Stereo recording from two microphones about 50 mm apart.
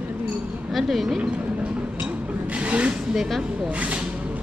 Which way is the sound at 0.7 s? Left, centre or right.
Centre.